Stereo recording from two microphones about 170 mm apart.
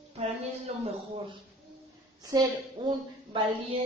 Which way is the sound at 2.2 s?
20° right (ahead or behind).